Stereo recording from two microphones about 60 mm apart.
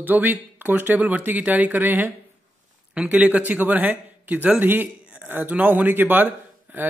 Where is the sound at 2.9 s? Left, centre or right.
Centre.